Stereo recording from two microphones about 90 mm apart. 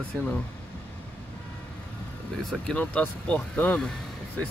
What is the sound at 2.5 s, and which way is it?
Speech, 10° left (ahead or behind).